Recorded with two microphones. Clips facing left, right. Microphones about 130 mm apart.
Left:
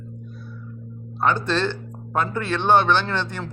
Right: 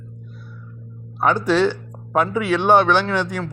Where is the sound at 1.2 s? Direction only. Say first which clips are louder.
Right 4 dB; 10° right (ahead or behind).